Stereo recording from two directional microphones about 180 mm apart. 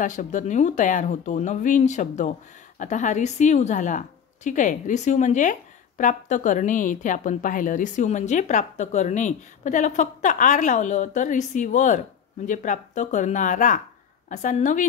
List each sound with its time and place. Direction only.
0.0 s a woman's voice: 45° left (ahead or behind)